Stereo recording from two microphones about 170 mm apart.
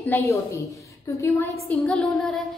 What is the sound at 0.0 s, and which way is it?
A woman's voice, 15° left (ahead or behind).